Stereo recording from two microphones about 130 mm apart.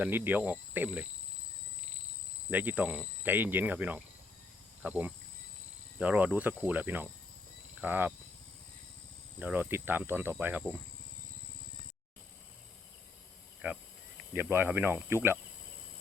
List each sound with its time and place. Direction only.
0.0 s speech: 15° right (ahead or behind)
2.5 s speech: 15° right (ahead or behind)
9.4 s speech: 15° right (ahead or behind)
13.6 s speech: 10° right (ahead or behind)